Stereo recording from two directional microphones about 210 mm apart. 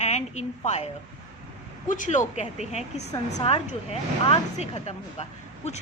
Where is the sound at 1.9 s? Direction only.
35° left (ahead or behind).